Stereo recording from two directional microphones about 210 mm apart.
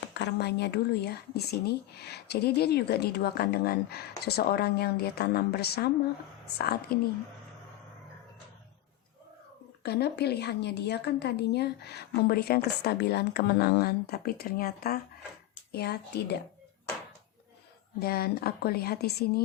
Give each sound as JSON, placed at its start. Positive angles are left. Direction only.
{"t": 0.1, "sound": "speech", "side_deg": 55}
{"t": 6.9, "sound": "speech", "side_deg": 45}
{"t": 9.8, "sound": "speech", "side_deg": 50}
{"t": 18.0, "sound": "speech", "side_deg": 45}